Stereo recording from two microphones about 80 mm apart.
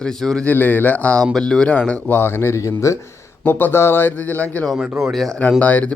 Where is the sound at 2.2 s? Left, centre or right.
Left.